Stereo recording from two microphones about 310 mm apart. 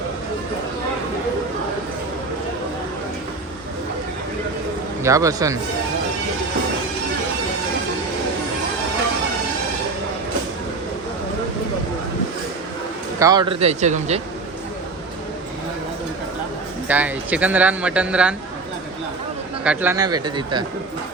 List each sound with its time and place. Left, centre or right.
5.0 s speech: centre
13.1 s speech: centre
16.9 s speech: centre
19.6 s speech: centre